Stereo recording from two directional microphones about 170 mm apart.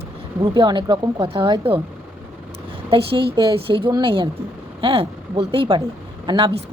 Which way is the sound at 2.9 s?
30° right (ahead or behind).